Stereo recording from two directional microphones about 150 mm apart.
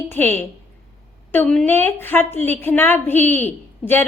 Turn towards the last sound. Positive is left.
turn(degrees=10)  # may be behind; listen again after turning